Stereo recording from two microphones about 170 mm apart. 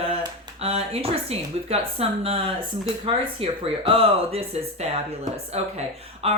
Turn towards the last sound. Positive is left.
turn(degrees=-40)  # may be behind; listen again after turning